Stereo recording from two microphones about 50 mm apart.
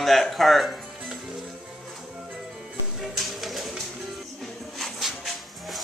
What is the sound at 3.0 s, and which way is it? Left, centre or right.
Music, centre.